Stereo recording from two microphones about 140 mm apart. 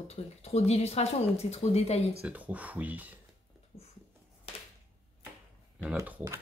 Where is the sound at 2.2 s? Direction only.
10° right (ahead or behind).